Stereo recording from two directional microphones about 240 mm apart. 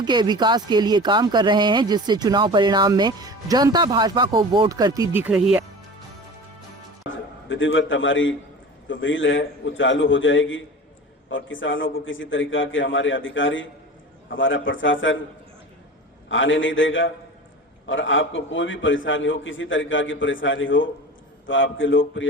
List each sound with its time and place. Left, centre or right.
0.0 s speech: centre
7.1 s a man's voice: left
16.3 s a man's voice: left